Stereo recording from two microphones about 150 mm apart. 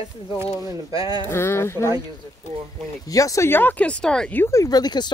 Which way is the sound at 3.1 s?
25° left (ahead or behind).